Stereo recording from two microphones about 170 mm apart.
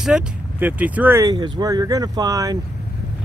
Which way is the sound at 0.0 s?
5° right (ahead or behind).